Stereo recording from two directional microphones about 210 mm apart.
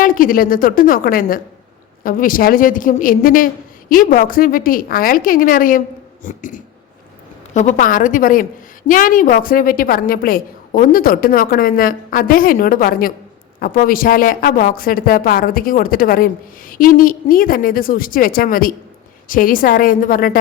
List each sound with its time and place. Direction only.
0.0 s a woman's voice: 40° left (ahead or behind)